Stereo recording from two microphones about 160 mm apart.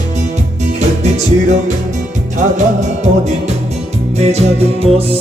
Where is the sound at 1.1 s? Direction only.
45° right (ahead or behind).